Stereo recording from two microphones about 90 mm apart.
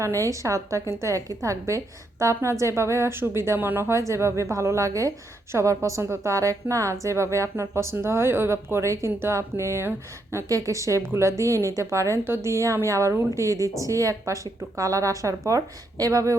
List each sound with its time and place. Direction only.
0.2 s a woman's voice: 35° right (ahead or behind)